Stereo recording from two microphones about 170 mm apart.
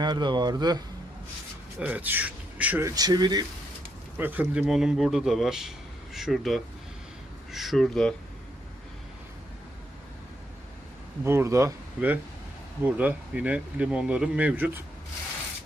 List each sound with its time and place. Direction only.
0.0 s speech: 25° right (ahead or behind)
1.8 s speech: 10° right (ahead or behind)
4.2 s speech: 10° right (ahead or behind)
11.2 s speech: 15° right (ahead or behind)